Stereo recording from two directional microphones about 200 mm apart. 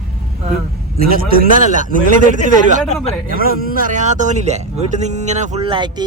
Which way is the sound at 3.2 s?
45° right (ahead or behind).